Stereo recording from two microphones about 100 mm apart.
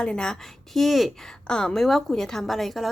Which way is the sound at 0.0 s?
10° left (ahead or behind).